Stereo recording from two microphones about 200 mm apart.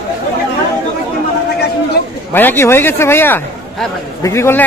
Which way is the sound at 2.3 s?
10° left (ahead or behind).